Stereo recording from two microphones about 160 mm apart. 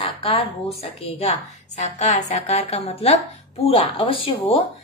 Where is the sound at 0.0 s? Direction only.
35° left (ahead or behind).